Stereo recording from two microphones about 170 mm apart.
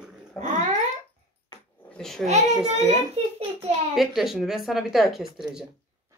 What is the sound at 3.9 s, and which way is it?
Speech, centre (ahead or behind).